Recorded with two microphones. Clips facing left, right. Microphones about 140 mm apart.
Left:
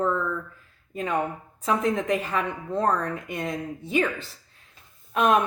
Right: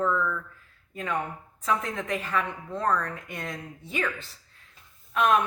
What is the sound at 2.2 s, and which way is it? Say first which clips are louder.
Speech: left 2 dB; 30° left (ahead or behind).